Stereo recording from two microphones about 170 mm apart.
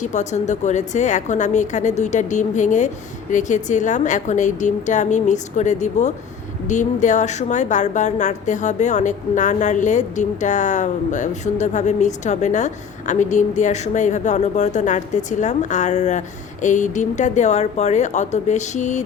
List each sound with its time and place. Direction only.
0.0 s a woman's voice: 45° left (ahead or behind)